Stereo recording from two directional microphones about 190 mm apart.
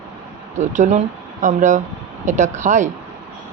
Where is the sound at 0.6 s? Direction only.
40° right (ahead or behind).